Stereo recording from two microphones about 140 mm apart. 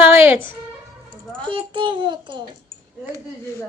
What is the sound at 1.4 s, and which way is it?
A child's voice, 35° right (ahead or behind).